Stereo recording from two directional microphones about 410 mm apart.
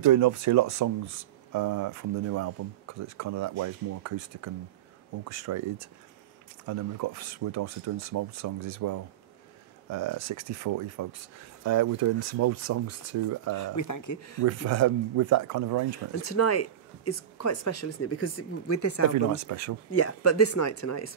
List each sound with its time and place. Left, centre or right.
0.0 s speech: right
13.6 s speech: left
14.4 s speech: right
16.2 s speech: left
19.3 s speech: right
19.9 s speech: left